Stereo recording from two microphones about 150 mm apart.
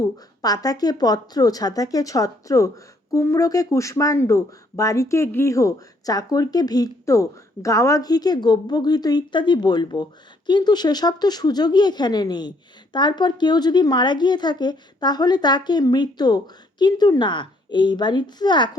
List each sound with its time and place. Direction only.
0.4 s speech: 25° left (ahead or behind)